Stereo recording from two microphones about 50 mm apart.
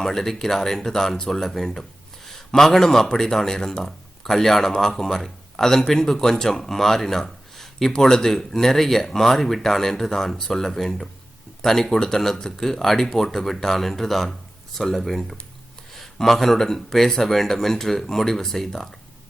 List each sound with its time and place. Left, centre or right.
0.0 s speech: centre